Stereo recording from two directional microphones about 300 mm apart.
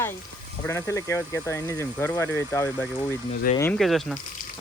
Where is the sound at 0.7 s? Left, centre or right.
Centre.